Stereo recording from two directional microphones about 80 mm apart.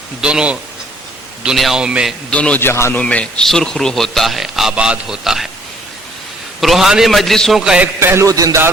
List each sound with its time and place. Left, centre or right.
0.2 s a man's voice: centre
2.3 s a man's voice: centre
2.6 s a man's voice: left
2.9 s a man's voice: centre
6.6 s a man's voice: centre
7.6 s a man's voice: centre
7.9 s a man's voice: right
8.3 s speech: right